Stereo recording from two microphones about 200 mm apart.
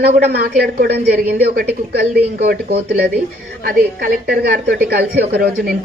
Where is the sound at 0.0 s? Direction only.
50° right (ahead or behind).